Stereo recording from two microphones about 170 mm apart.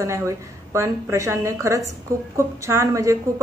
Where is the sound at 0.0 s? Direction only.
15° right (ahead or behind).